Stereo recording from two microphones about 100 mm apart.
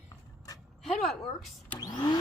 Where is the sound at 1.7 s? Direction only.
40° left (ahead or behind).